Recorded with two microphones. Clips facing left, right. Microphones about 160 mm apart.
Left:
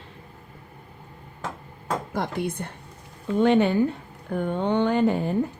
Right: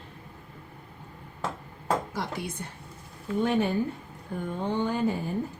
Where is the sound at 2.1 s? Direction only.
55° left (ahead or behind).